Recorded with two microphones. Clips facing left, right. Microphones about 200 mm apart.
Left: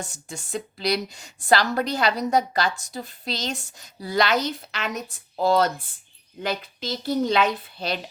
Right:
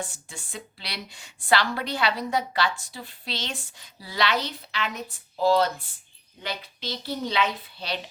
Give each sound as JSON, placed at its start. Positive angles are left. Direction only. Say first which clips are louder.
{"t": 0.1, "sound": "a woman's voice", "louder": "left 9 dB", "side_deg": 40}